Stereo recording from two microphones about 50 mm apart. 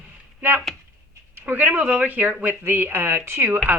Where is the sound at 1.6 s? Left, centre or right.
Right.